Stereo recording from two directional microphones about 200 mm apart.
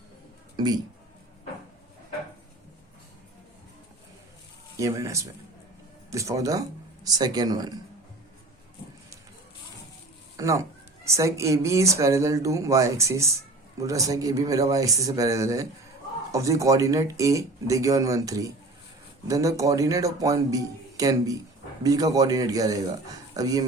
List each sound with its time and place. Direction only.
0.5 s speech: 20° right (ahead or behind)
4.8 s speech: 15° right (ahead or behind)
10.3 s speech: 15° right (ahead or behind)